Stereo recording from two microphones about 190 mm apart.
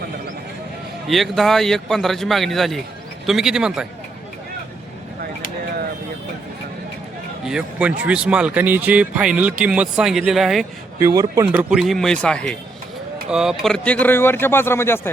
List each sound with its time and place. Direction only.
1.0 s a man's voice: centre (ahead or behind)
7.4 s a man's voice: 5° right (ahead or behind)
11.0 s speech: 15° right (ahead or behind)
11.7 s a man's voice: centre (ahead or behind)